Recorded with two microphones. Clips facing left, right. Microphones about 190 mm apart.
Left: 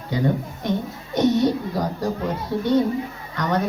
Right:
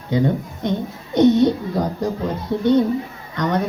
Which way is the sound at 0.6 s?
20° right (ahead or behind).